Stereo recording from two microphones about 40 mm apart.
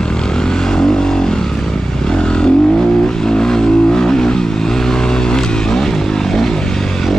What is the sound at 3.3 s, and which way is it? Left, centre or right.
Vehicle, centre.